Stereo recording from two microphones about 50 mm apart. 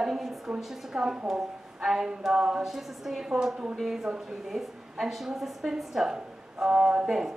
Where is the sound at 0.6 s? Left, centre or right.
Centre.